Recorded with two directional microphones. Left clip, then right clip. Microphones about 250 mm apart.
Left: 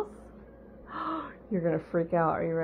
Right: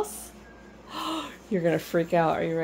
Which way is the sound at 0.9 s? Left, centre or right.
Centre.